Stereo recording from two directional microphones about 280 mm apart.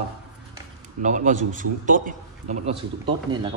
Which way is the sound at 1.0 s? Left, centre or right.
Right.